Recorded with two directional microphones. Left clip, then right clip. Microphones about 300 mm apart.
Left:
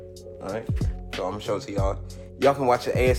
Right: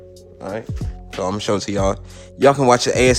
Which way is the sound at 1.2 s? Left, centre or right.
Right.